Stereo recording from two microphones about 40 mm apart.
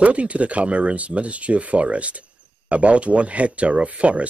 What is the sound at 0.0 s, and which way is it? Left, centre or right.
Speech, right.